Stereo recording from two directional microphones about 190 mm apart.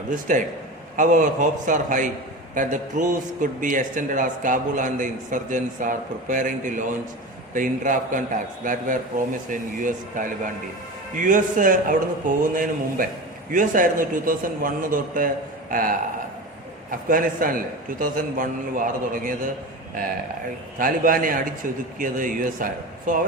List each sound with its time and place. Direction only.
0.1 s a man's voice: 40° right (ahead or behind)
17.1 s a man's voice: 45° right (ahead or behind)
20.7 s a man's voice: 45° right (ahead or behind)